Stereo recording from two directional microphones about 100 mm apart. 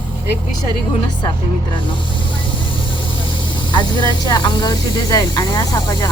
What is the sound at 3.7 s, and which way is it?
A woman's voice, 50° left (ahead or behind).